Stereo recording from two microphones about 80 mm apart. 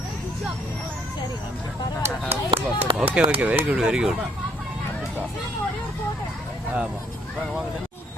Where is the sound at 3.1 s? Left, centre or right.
Centre.